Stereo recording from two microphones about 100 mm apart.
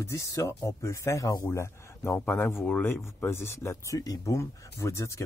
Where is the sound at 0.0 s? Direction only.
30° left (ahead or behind).